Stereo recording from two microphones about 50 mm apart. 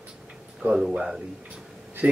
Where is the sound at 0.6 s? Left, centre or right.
Centre.